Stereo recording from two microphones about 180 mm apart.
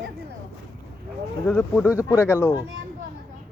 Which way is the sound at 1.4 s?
10° left (ahead or behind).